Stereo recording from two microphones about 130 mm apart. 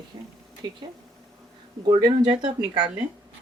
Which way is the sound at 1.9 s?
35° right (ahead or behind).